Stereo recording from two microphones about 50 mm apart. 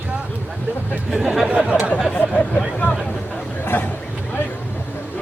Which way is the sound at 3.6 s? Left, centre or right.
Left.